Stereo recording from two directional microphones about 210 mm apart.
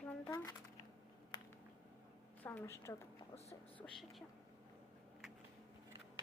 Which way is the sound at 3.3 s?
30° left (ahead or behind).